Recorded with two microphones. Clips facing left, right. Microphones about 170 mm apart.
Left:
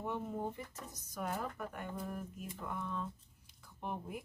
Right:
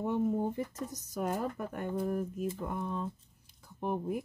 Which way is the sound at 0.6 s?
40° right (ahead or behind).